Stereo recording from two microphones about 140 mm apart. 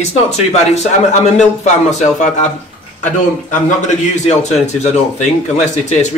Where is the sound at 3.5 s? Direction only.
60° left (ahead or behind).